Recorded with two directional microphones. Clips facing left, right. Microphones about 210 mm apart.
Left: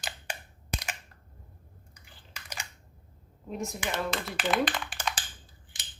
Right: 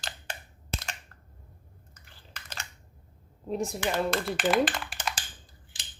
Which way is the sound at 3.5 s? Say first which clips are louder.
Right 5 dB; 35° right (ahead or behind).